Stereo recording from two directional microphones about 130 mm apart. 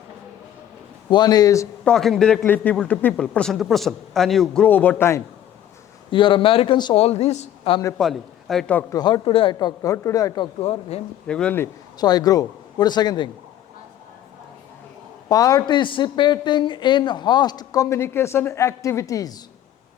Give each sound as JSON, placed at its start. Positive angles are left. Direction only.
{"t": 1.1, "sound": "a man's voice", "side_deg": 30}
{"t": 1.8, "sound": "a man's voice", "side_deg": 5}
{"t": 6.1, "sound": "a man's voice", "side_deg": 40}
{"t": 6.9, "sound": "speech", "side_deg": 55}
{"t": 7.9, "sound": "speech", "side_deg": 0}
{"t": 8.9, "sound": "a man's voice", "side_deg": 35}
{"t": 10.6, "sound": "speech", "side_deg": 50}
{"t": 11.3, "sound": "speech", "side_deg": 10}
{"t": 11.9, "sound": "a man's voice", "side_deg": 30}
{"t": 15.3, "sound": "a man's voice", "side_deg": 30}